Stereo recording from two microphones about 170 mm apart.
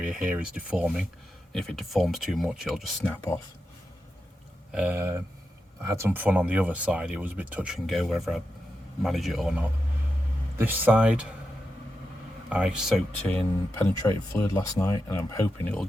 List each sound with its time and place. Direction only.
0.0 s speech: 5° right (ahead or behind)
4.7 s speech: 10° right (ahead or behind)
10.6 s speech: 10° right (ahead or behind)
12.5 s speech: 5° right (ahead or behind)
13.2 s speech: 10° left (ahead or behind)